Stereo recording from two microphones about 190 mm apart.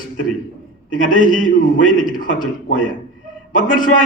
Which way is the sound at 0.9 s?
45° left (ahead or behind).